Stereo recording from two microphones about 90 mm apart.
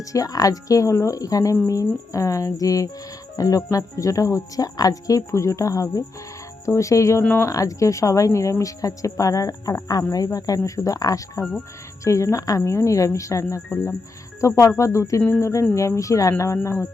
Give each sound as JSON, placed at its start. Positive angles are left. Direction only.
{"t": 0.0, "sound": "speech", "side_deg": 40}